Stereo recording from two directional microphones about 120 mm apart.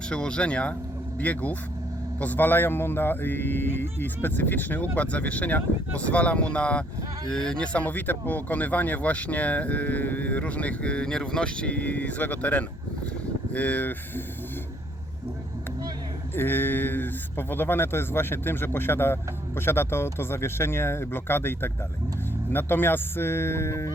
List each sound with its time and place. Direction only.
0.1 s speech: 10° left (ahead or behind)
16.3 s speech: 15° left (ahead or behind)